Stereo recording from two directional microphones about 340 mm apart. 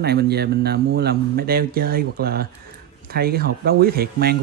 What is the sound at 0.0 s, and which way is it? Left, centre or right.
Speech, right.